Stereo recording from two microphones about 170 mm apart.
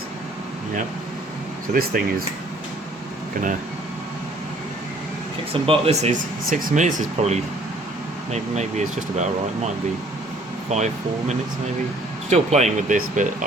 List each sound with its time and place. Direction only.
1.7 s speech: 60° right (ahead or behind)
5.6 s speech: 35° right (ahead or behind)
10.7 s speech: 45° right (ahead or behind)
12.3 s speech: 40° right (ahead or behind)